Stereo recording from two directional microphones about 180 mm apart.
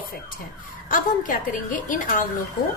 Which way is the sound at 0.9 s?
50° left (ahead or behind).